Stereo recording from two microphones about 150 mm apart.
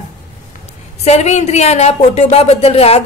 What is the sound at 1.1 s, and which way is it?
Speech, 45° left (ahead or behind).